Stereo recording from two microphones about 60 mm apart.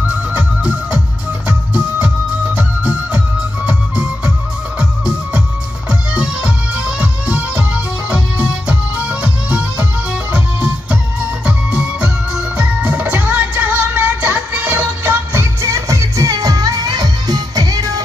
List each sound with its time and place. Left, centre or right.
0.1 s music: right
15.6 s music: right